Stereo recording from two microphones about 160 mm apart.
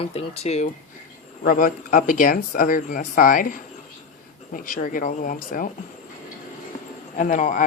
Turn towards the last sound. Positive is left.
turn(degrees=55)  # may be behind; listen again after turning